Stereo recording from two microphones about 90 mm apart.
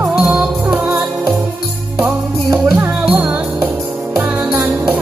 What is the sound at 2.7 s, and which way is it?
Music, 15° right (ahead or behind).